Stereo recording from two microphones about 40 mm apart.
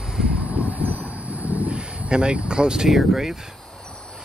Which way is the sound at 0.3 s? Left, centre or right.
Right.